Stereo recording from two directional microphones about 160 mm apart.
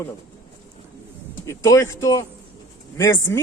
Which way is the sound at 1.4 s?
20° left (ahead or behind).